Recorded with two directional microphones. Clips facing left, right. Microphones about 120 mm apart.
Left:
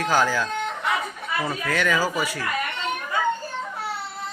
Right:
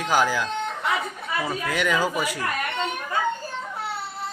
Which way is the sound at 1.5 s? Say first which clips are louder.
Left 1 dB; 15° right (ahead or behind).